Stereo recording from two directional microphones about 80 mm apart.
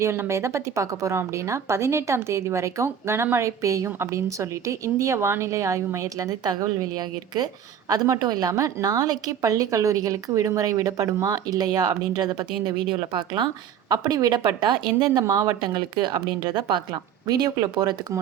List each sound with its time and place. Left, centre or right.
0.0 s a woman's voice: right
13.9 s speech: right
15.2 s a woman's voice: right
15.6 s speech: right
16.9 s a woman's voice: right